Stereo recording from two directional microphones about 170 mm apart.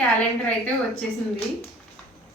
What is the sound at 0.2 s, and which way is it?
Speech, 5° left (ahead or behind).